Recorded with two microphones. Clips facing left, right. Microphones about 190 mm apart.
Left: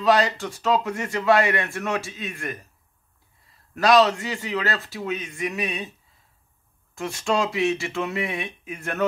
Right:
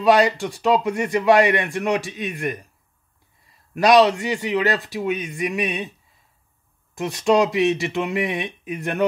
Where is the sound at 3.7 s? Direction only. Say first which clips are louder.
Right 3 dB; 15° right (ahead or behind).